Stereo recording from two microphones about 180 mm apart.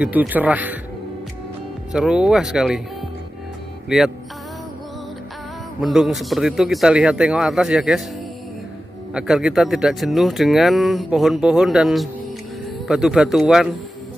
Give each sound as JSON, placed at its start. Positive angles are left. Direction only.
{"t": 0.0, "sound": "speech", "side_deg": -10}
{"t": 1.9, "sound": "speech", "side_deg": -5}
{"t": 3.9, "sound": "speech", "side_deg": -5}
{"t": 5.8, "sound": "speech", "side_deg": 0}
{"t": 9.1, "sound": "speech", "side_deg": -5}